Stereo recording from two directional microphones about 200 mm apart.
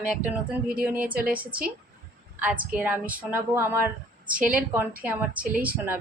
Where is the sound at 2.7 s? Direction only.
10° right (ahead or behind).